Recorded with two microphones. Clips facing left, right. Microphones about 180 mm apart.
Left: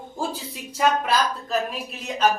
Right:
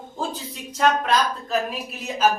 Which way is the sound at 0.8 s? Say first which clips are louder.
Right 1 dB; 5° left (ahead or behind).